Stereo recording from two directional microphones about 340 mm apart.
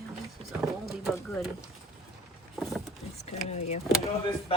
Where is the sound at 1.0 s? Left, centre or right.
Centre.